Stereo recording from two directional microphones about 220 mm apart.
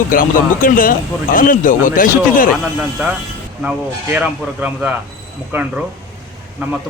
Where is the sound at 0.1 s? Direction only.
40° left (ahead or behind).